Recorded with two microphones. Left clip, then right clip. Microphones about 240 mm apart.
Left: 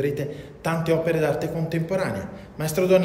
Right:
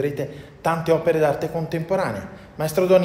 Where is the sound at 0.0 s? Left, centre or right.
Centre.